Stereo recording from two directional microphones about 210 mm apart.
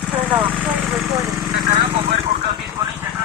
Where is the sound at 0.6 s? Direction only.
Centre (ahead or behind).